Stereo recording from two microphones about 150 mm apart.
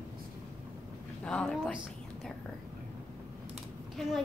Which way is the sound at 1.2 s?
5° left (ahead or behind).